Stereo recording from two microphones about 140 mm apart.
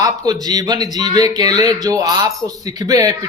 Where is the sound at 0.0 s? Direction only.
25° right (ahead or behind).